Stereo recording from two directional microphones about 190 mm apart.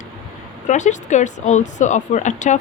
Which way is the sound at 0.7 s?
40° left (ahead or behind).